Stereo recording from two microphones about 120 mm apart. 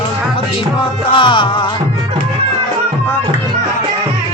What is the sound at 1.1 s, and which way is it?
Music, 40° left (ahead or behind).